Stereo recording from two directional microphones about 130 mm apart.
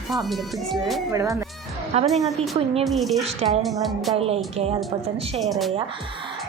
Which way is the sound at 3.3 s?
55° right (ahead or behind).